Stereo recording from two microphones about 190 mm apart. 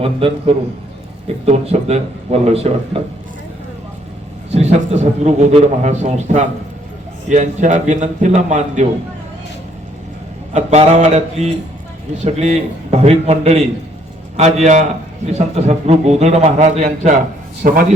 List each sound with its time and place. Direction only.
0.0 s a man's voice: 30° right (ahead or behind)
4.5 s a man's voice: 35° right (ahead or behind)
10.5 s a man's voice: 35° right (ahead or behind)